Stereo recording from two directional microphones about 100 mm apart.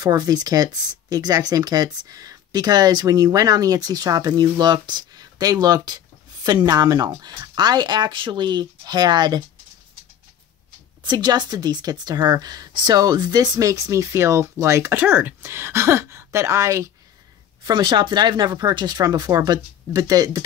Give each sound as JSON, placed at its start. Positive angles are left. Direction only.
{"t": 0.0, "sound": "speech", "side_deg": -40}
{"t": 11.1, "sound": "speech", "side_deg": -45}
{"t": 17.6, "sound": "speech", "side_deg": -50}